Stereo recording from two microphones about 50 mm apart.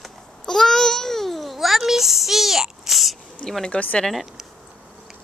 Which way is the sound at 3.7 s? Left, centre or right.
Left.